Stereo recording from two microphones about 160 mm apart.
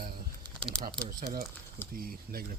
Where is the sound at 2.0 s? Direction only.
70° right (ahead or behind).